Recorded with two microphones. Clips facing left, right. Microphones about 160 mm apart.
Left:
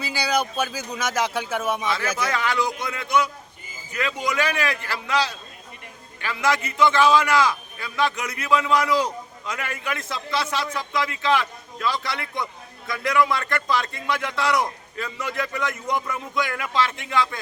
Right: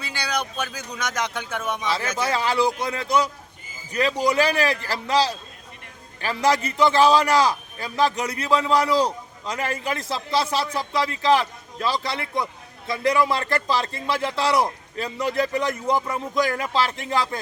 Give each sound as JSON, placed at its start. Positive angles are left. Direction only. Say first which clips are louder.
{"t": 0.0, "sound": "speech", "louder": "left 4 dB", "side_deg": 5}
{"t": 2.1, "sound": "a man's voice", "louder": "right 2 dB", "side_deg": -30}